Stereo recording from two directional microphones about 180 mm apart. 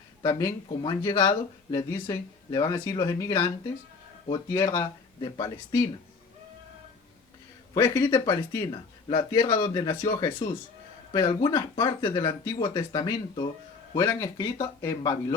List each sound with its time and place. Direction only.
0.2 s speech: 20° left (ahead or behind)
7.7 s speech: 20° left (ahead or behind)